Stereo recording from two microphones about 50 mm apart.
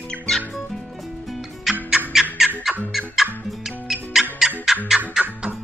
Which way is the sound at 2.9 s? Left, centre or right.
Centre.